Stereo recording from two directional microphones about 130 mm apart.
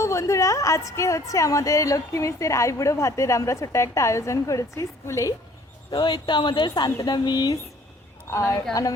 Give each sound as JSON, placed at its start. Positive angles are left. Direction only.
{"t": 0.0, "sound": "a woman's voice", "side_deg": 25}
{"t": 5.9, "sound": "a woman's voice", "side_deg": 35}
{"t": 8.3, "sound": "a woman's voice", "side_deg": 20}